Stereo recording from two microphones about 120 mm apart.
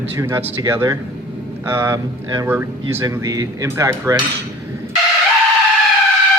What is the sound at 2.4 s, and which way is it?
Speech, 20° right (ahead or behind).